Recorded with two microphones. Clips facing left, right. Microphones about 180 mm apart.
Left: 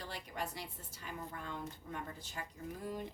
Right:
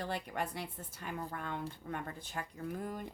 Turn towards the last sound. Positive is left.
turn(degrees=-50)  # may be behind; listen again after turning